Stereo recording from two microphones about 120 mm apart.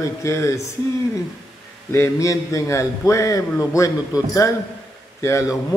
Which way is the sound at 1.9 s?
25° left (ahead or behind).